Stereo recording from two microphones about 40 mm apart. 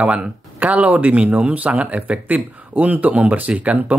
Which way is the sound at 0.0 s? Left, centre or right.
Right.